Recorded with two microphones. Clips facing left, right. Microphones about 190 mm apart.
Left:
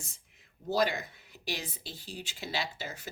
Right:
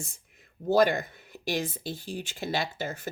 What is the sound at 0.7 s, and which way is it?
Speech, 55° right (ahead or behind).